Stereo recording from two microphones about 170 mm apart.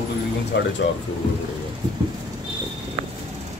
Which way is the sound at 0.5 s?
90° left.